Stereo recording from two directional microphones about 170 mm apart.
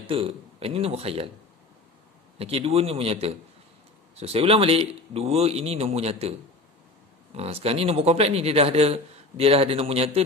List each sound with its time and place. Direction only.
0.0 s speech: 30° right (ahead or behind)
2.3 s speech: 35° right (ahead or behind)
7.3 s speech: 35° right (ahead or behind)